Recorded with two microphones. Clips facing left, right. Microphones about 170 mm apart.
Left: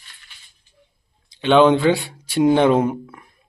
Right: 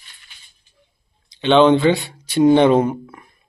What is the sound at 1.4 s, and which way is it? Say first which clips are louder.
Speech: right 1 dB; 5° left (ahead or behind).